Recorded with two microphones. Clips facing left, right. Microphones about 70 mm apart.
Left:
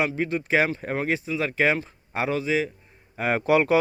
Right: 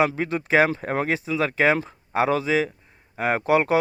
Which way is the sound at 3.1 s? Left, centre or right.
Right.